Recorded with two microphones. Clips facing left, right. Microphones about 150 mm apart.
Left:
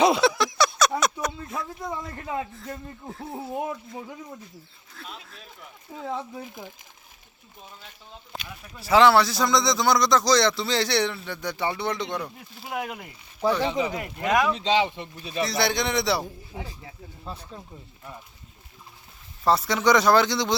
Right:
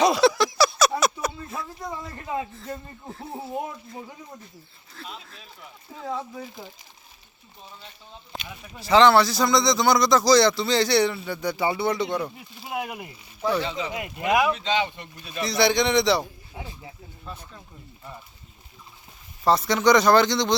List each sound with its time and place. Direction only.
0.2 s a sound: centre (ahead or behind)
2.3 s speech: 5° right (ahead or behind)
4.9 s a sound: centre (ahead or behind)
6.3 s speech: 15° left (ahead or behind)
8.3 s speech: centre (ahead or behind)
13.6 s speech: 15° left (ahead or behind)
13.9 s speech: 5° right (ahead or behind)
14.5 s speech: 30° left (ahead or behind)
15.4 s speech: centre (ahead or behind)
17.2 s speech: 30° left (ahead or behind)
19.5 s speech: centre (ahead or behind)